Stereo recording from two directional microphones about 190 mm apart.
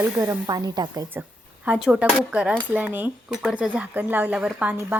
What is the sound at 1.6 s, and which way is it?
Speech, 5° right (ahead or behind).